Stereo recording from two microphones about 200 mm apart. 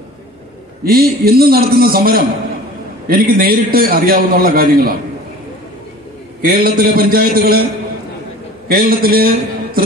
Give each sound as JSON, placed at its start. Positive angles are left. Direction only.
{"t": 0.8, "sound": "a man's voice", "side_deg": -50}
{"t": 6.4, "sound": "a man's voice", "side_deg": -50}
{"t": 8.6, "sound": "a man's voice", "side_deg": -45}